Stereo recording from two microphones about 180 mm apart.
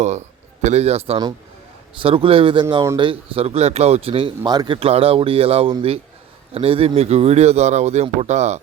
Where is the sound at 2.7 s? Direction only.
15° right (ahead or behind).